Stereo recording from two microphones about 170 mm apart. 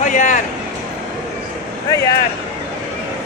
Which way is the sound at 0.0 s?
50° left (ahead or behind).